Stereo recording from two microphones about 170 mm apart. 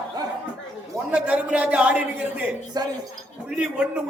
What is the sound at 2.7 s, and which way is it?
Speech, 25° right (ahead or behind).